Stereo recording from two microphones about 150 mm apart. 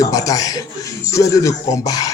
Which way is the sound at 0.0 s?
25° left (ahead or behind).